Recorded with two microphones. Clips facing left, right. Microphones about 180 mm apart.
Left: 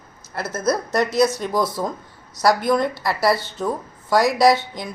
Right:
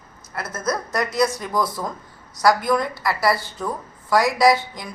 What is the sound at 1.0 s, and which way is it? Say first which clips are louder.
Speech: left 2 dB; 5° left (ahead or behind).